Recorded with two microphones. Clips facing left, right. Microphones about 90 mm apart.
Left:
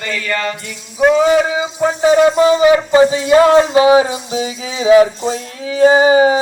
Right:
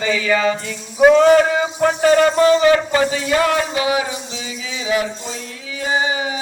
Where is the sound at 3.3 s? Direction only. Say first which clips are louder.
Left 10 dB; 30° left (ahead or behind).